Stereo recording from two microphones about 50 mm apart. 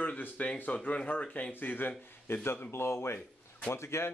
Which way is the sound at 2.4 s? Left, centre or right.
Left.